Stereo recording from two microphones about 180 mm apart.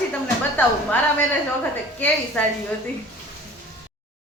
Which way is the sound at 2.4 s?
5° left (ahead or behind).